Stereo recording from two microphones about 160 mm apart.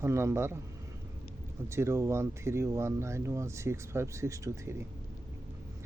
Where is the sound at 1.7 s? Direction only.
15° right (ahead or behind).